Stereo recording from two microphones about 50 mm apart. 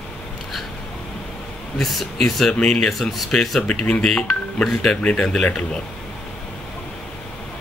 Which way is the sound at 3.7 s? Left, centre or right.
Centre.